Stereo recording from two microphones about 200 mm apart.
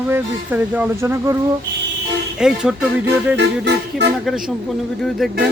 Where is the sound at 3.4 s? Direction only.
60° right (ahead or behind).